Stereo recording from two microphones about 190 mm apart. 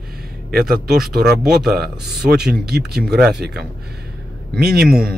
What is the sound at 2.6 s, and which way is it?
Speech, 55° right (ahead or behind).